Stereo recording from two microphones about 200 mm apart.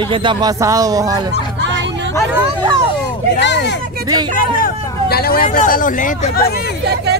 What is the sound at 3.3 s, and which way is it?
Speech, 60° left (ahead or behind).